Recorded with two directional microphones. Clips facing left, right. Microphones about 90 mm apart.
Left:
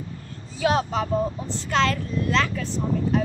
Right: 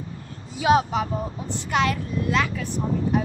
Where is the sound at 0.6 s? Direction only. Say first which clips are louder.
Right 3 dB; 15° right (ahead or behind).